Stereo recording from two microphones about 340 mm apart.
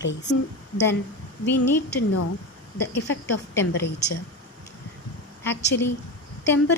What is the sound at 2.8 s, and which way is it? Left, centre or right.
A woman's voice, left.